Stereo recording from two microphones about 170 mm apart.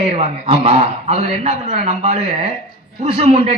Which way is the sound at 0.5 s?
35° right (ahead or behind).